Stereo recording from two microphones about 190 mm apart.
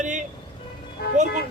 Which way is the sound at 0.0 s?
40° right (ahead or behind).